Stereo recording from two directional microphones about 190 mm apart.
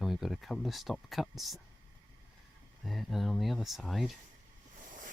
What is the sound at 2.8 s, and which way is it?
Speech, centre (ahead or behind).